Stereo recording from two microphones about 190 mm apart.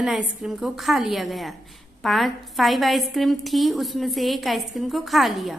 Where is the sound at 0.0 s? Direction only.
Centre (ahead or behind).